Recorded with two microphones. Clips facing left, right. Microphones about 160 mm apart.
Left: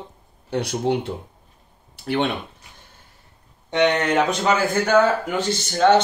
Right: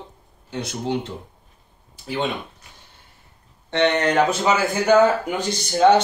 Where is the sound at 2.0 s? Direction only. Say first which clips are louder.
Left 3 dB; 65° left (ahead or behind).